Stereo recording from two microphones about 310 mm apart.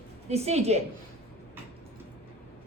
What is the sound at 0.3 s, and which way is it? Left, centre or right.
Speech, centre.